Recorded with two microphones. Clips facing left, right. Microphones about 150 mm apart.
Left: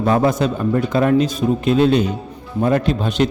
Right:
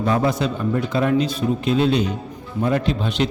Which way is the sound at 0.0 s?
50° left (ahead or behind).